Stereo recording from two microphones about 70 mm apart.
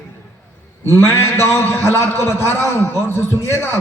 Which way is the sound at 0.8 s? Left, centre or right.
Right.